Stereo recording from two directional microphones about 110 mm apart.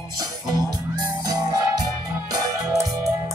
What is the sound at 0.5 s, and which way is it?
Music, 35° right (ahead or behind).